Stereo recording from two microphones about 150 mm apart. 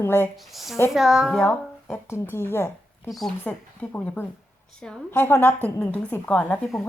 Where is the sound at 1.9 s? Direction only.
15° left (ahead or behind).